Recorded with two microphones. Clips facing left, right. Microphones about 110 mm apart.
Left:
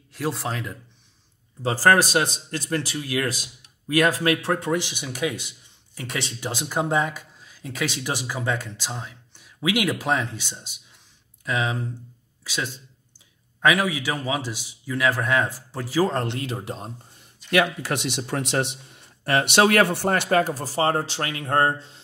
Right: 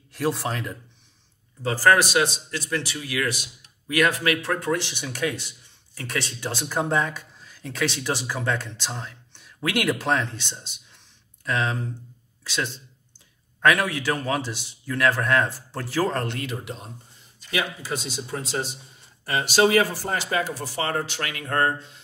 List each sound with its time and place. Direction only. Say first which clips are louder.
0.1 s a man's voice: right 2 dB; centre (ahead or behind)
1.6 s a man's voice: left 1 dB; 30° left (ahead or behind); by 16.1 s 10° left (ahead or behind)
16.1 s a man's voice: left 1 dB; 20° left (ahead or behind); by 16.9 s 35° left (ahead or behind)
17.5 s a man's voice: left 6 dB; 65° left (ahead or behind); by 22.0 s 30° left (ahead or behind)